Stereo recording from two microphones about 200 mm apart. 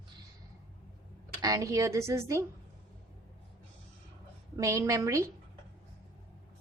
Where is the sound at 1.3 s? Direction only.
20° right (ahead or behind).